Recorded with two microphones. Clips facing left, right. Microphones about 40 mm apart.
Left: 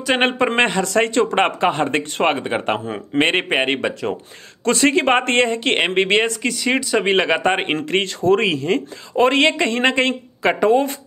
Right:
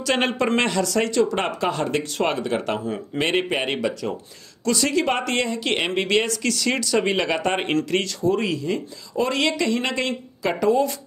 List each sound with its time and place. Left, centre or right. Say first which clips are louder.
0.2 s a man's voice: left 4 dB; left
6.4 s a man's voice: left 3 dB; left
8.2 s speech: left 5 dB; left